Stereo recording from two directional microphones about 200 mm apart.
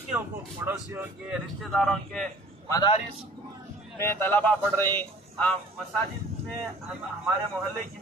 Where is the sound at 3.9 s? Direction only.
10° left (ahead or behind).